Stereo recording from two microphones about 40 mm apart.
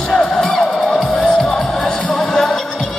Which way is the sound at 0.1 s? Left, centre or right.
Centre.